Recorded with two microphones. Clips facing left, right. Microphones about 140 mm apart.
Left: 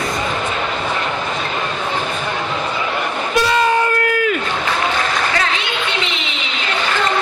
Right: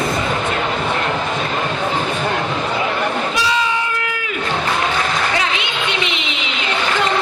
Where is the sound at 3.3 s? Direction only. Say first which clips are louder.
Left 4 dB; 55° left (ahead or behind).